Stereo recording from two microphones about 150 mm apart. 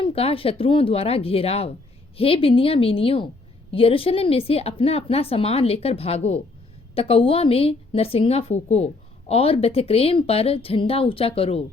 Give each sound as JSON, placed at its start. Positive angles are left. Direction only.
{"t": 0.0, "sound": "a woman's voice", "side_deg": 40}